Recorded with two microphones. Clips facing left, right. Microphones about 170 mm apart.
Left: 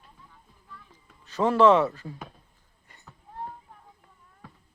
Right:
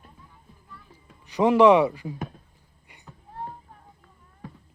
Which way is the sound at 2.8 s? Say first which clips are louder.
Right 3 dB; 15° right (ahead or behind).